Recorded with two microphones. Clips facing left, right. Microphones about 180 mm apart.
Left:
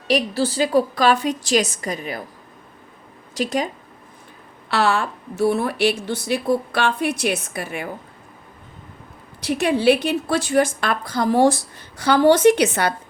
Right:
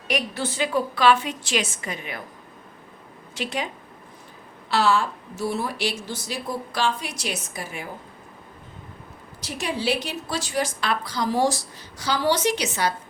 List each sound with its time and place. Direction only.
0.1 s a woman's voice: 35° left (ahead or behind)
3.3 s a woman's voice: 40° left (ahead or behind)
4.7 s a woman's voice: 60° left (ahead or behind)
9.4 s a woman's voice: 60° left (ahead or behind)